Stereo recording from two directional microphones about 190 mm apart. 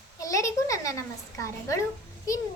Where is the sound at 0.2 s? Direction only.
15° left (ahead or behind).